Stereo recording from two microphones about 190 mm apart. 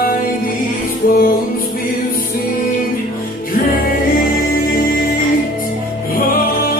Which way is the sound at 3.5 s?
50° left (ahead or behind).